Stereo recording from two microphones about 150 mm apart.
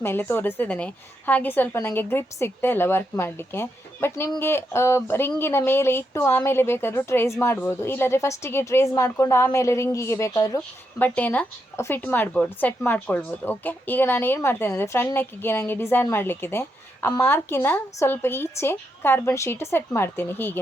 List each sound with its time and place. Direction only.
0.0 s speech: 15° left (ahead or behind)
10.9 s speech: 10° left (ahead or behind)